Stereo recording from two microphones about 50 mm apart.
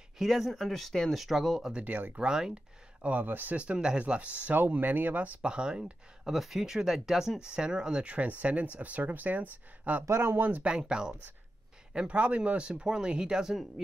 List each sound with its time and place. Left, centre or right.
0.2 s speech: centre
1.9 s speech: right
2.1 s speech: centre
3.0 s speech: right
3.5 s speech: right
4.6 s speech: right
5.4 s speech: centre
6.3 s speech: centre; by 10.0 s right
10.0 s speech: right
10.7 s speech: centre